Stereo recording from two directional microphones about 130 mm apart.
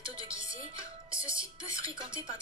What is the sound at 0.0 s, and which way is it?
Speech, 40° right (ahead or behind).